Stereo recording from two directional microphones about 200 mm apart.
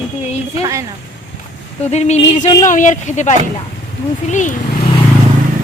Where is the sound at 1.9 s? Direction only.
35° left (ahead or behind).